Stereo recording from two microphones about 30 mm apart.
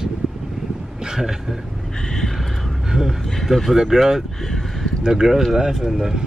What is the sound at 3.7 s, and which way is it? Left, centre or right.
Speech, centre.